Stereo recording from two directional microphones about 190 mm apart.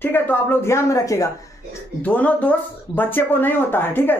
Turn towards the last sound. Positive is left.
turn(degrees=10)  # may be behind; listen again after turning